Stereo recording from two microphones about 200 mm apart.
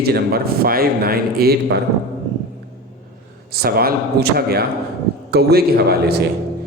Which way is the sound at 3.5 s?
50° right (ahead or behind).